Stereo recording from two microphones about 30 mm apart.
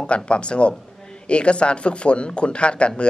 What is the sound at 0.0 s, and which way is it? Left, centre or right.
A man's voice, left.